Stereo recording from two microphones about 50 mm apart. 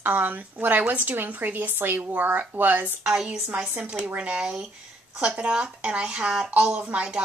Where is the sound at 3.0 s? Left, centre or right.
Centre.